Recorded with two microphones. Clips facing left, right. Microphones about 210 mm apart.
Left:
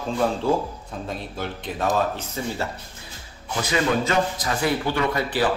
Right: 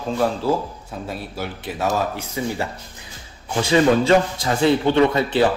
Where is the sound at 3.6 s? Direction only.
30° right (ahead or behind).